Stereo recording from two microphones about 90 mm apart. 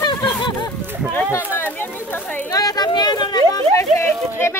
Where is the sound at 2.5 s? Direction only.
45° left (ahead or behind).